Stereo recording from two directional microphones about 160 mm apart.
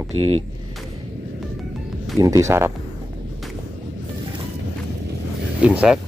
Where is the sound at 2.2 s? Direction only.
20° right (ahead or behind).